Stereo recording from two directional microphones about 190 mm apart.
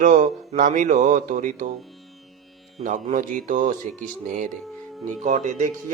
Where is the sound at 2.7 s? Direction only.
40° right (ahead or behind).